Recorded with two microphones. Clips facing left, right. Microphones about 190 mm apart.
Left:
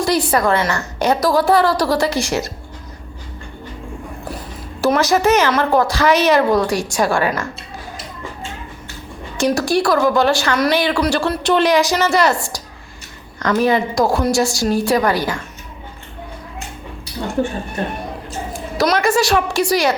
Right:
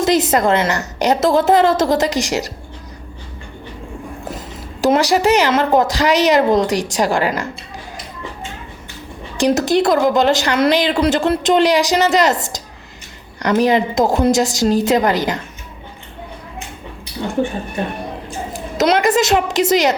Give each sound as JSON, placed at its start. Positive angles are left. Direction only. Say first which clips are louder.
{"t": 0.0, "sound": "a woman's voice", "louder": "right 2 dB", "side_deg": -20}
{"t": 4.8, "sound": "a woman's voice", "louder": "right 1 dB", "side_deg": -15}
{"t": 9.4, "sound": "a woman's voice", "louder": "right 2 dB", "side_deg": -20}
{"t": 18.3, "sound": "a woman's voice", "louder": "even", "side_deg": -20}